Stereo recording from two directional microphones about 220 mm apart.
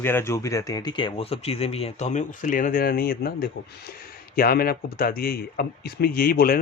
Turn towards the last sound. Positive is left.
turn(degrees=40)  # may be behind; listen again after turning